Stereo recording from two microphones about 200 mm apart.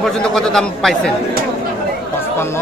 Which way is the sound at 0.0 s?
Centre (ahead or behind).